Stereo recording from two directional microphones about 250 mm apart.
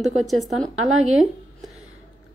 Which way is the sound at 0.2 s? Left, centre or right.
Centre.